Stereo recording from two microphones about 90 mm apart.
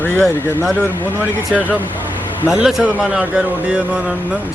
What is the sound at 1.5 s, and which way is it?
A man's voice, 5° right (ahead or behind).